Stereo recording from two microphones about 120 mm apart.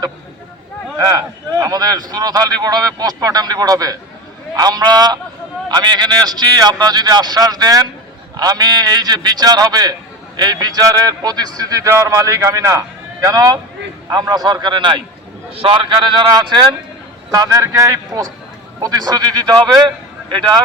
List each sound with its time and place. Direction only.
0.9 s a man's voice: 30° right (ahead or behind)
17.3 s a man's voice: 30° right (ahead or behind)